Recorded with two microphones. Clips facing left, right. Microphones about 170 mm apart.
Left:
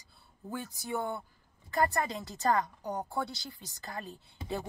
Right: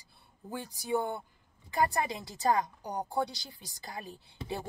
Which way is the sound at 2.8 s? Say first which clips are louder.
Even; 35° right (ahead or behind).